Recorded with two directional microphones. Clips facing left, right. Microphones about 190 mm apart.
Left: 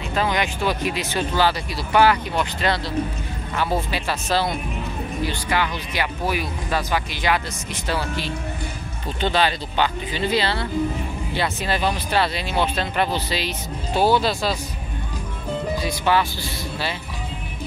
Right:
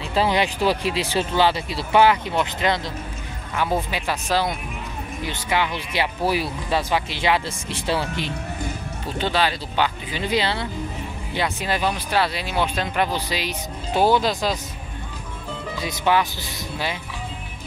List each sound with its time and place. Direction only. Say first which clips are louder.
0.1 s speech: right 2 dB; 30° right (ahead or behind)
9.2 s speech: left 2 dB; 5° right (ahead or behind)
15.8 s speech: right 2 dB; 20° right (ahead or behind)